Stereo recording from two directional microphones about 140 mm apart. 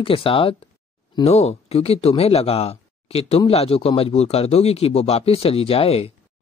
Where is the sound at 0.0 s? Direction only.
40° left (ahead or behind).